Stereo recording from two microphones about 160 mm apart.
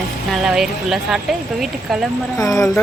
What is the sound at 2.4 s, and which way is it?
Speech, 20° left (ahead or behind).